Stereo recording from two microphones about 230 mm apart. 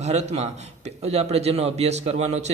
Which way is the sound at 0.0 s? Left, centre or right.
Right.